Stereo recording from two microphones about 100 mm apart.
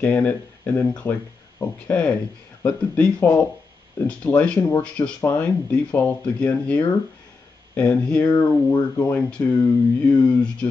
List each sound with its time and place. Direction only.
0.0 s speech: 15° left (ahead or behind)
9.3 s speech: 15° left (ahead or behind)